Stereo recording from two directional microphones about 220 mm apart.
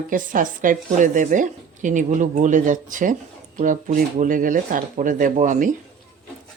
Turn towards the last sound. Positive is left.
turn(degrees=-35)  # may be behind; listen again after turning